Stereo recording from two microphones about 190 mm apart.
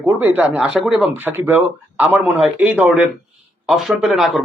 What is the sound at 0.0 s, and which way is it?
A man's voice, 10° right (ahead or behind).